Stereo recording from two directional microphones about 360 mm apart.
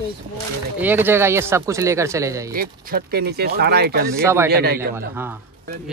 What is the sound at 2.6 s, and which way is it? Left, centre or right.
Speech, right.